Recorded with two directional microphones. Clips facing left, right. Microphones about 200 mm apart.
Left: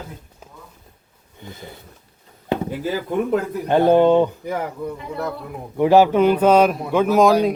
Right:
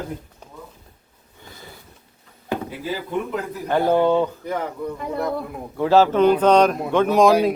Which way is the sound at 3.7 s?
20° left (ahead or behind).